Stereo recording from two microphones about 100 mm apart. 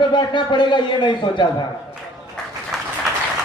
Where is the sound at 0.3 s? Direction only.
50° left (ahead or behind).